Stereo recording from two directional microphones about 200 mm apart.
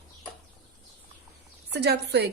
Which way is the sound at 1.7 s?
55° right (ahead or behind).